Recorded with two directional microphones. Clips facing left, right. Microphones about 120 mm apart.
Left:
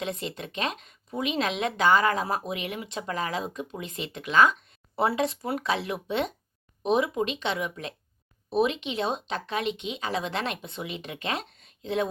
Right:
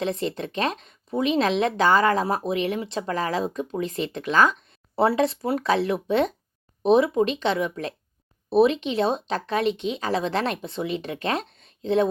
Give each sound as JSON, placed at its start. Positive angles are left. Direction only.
{"t": 0.0, "sound": "speech", "side_deg": -35}